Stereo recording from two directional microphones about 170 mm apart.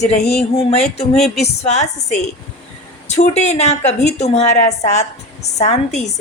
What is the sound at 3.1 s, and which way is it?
A woman's voice, 40° left (ahead or behind).